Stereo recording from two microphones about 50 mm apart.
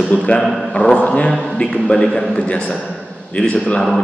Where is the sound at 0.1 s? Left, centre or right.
Left.